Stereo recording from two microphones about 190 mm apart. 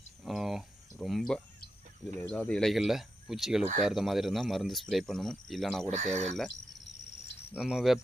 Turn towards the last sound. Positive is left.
turn(degrees=-5)  # may be behind; listen again after turning